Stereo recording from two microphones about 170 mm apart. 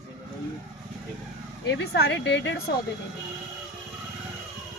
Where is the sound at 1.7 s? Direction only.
75° left (ahead or behind).